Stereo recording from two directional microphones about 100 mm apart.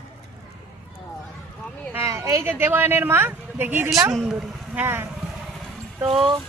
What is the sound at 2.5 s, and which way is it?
Speech, 20° right (ahead or behind).